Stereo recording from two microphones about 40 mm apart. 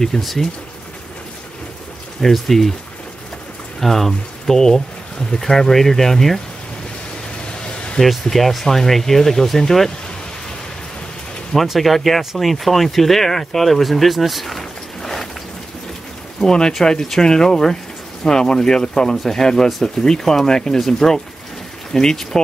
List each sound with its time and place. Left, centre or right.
0.2 s speech: centre
2.2 s speech: centre
3.8 s speech: centre
7.4 s a sound: left
8.0 s speech: centre
11.6 s speech: centre
14.6 s boat: centre
16.3 s speech: centre